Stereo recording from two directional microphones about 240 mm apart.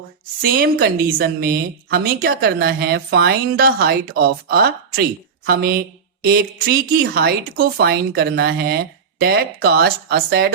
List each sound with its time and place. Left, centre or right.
0.4 s speech: right